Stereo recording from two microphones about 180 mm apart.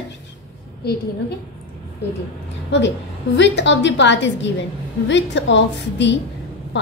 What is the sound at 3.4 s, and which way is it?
A woman's voice, 85° left.